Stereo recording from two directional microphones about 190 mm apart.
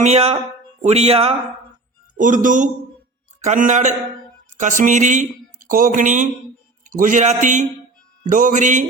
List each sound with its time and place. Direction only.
0.0 s speech: 35° right (ahead or behind)
2.1 s a man's voice: 45° right (ahead or behind)